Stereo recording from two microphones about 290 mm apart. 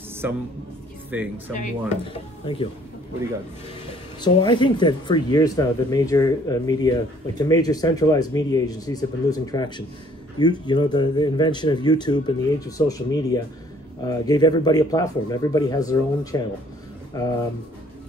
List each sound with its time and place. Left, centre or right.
0.2 s a man's voice: centre
1.5 s speech: left
4.2 s speech: centre